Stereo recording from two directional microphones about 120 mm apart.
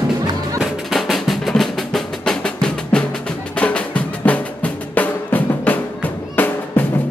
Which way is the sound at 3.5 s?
10° left (ahead or behind).